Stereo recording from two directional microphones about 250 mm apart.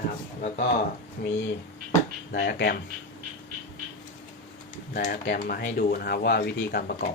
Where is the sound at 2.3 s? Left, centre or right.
Left.